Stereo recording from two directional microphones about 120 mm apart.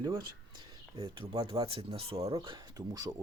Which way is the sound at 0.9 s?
50° right (ahead or behind).